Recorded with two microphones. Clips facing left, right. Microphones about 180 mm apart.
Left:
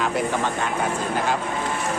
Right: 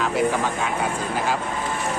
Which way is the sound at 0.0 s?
Centre (ahead or behind).